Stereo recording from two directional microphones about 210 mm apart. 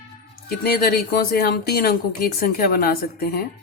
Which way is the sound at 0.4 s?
45° left (ahead or behind).